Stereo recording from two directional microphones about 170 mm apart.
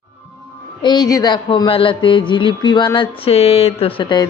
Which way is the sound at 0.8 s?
25° left (ahead or behind).